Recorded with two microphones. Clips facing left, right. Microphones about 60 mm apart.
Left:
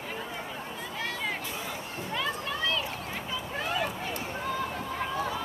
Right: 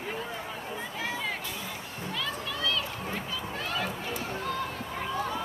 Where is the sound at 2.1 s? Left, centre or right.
Left.